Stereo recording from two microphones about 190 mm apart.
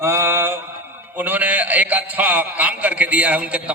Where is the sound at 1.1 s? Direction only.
10° right (ahead or behind).